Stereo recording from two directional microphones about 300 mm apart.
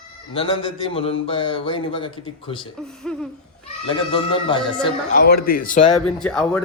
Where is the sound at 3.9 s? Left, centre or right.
Centre.